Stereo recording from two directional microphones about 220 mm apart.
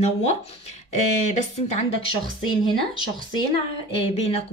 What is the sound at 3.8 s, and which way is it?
Speech, 25° left (ahead or behind).